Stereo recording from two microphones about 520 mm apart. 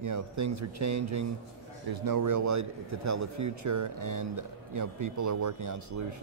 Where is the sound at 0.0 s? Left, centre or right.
Right.